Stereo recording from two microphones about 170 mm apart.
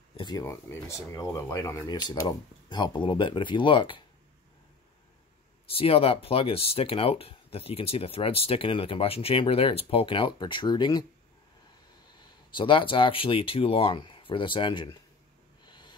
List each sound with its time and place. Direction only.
0.1 s speech: 25° left (ahead or behind)
5.7 s speech: 35° left (ahead or behind)
12.5 s speech: 30° left (ahead or behind)
15.6 s snort: 25° left (ahead or behind)